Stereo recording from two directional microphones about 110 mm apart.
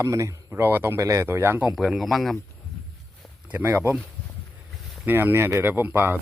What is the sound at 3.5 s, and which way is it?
Speech, 15° right (ahead or behind).